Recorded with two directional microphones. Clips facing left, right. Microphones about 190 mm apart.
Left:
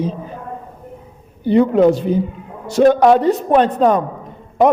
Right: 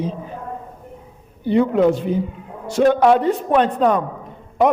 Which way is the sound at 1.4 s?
40° left (ahead or behind).